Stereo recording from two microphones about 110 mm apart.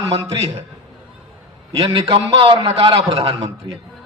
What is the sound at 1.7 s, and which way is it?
A man's voice, 60° right (ahead or behind).